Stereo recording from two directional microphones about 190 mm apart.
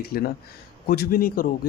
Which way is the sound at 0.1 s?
50° left (ahead or behind).